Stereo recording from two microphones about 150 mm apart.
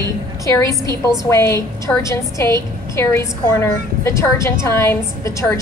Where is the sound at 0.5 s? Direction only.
20° left (ahead or behind).